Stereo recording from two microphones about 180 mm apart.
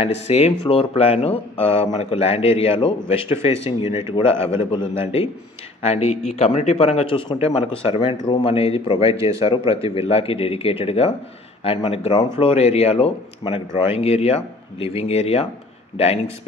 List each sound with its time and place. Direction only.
0.0 s speech: 35° left (ahead or behind)
9.1 s speech: 15° right (ahead or behind)
9.4 s speech: 30° left (ahead or behind)